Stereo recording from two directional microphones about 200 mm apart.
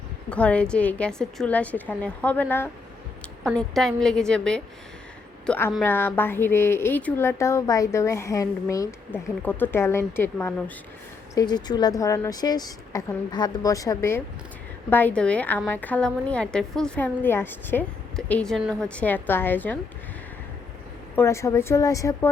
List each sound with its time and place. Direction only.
0.3 s a woman's voice: 5° left (ahead or behind)
11.3 s a woman's voice: 20° left (ahead or behind)
21.2 s a woman's voice: 15° left (ahead or behind)